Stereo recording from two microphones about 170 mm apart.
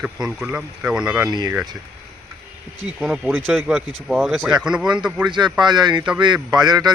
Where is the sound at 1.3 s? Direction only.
25° right (ahead or behind).